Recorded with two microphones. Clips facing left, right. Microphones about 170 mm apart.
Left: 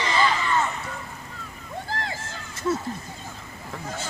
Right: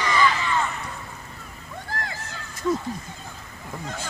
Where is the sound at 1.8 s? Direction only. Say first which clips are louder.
Left 1 dB; 25° left (ahead or behind).